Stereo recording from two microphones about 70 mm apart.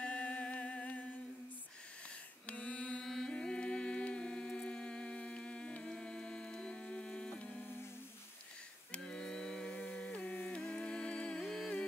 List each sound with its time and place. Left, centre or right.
0.0 s music: centre
2.4 s mantra: centre
3.0 s music: centre
8.9 s music: centre